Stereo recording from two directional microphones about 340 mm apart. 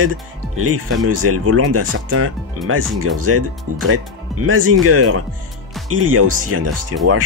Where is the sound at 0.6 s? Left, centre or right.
Right.